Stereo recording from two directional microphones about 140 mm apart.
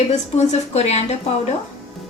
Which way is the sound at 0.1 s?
55° left (ahead or behind).